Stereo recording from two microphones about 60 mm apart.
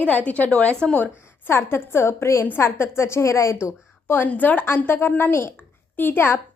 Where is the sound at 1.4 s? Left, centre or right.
Left.